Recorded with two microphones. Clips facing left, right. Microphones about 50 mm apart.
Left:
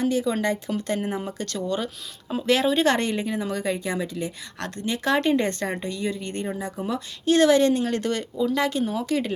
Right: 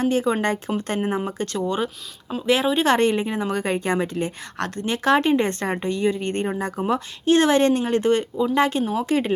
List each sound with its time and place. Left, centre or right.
0.0 s speech: right